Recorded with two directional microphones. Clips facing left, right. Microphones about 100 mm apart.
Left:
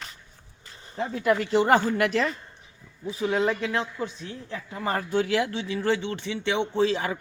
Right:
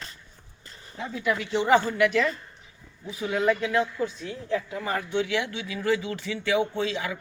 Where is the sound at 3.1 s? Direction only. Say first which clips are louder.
Even; 30° left (ahead or behind).